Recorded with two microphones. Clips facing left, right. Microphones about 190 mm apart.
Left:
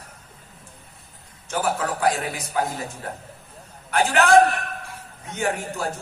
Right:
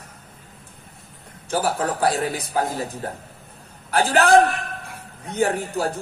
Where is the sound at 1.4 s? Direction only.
35° right (ahead or behind).